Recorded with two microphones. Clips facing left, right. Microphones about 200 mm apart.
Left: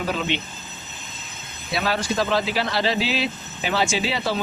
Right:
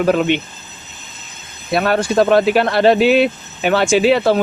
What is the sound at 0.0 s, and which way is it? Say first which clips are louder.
Speech: right 11 dB; 55° right (ahead or behind).